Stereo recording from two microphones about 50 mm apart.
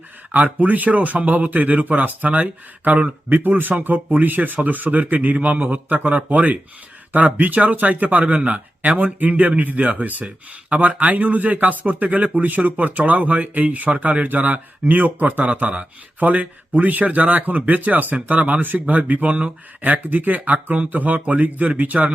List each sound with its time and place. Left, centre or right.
0.3 s speech: right